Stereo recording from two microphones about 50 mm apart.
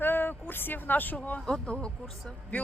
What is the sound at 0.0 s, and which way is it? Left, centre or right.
Speech, left.